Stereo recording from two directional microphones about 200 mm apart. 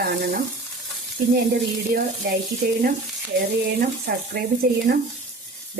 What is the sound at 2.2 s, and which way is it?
Speech, 50° right (ahead or behind).